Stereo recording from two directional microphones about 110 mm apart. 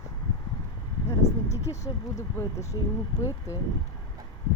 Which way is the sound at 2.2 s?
30° left (ahead or behind).